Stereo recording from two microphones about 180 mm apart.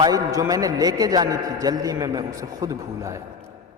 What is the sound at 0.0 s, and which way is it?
A man's voice, 20° right (ahead or behind).